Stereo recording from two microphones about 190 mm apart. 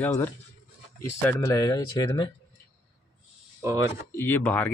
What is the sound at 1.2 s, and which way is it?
Speech, 15° left (ahead or behind).